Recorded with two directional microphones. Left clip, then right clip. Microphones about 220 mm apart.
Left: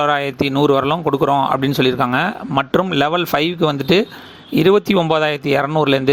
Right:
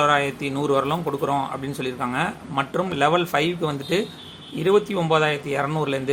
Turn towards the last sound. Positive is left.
turn(degrees=35)  # may be behind; listen again after turning